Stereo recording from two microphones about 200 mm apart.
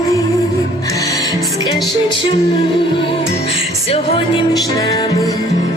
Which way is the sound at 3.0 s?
30° left (ahead or behind).